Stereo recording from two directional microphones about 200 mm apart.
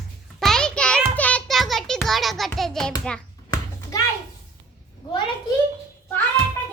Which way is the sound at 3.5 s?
20° left (ahead or behind).